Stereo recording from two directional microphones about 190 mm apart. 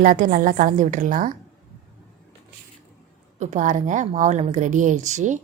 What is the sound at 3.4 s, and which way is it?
Speech, 40° right (ahead or behind).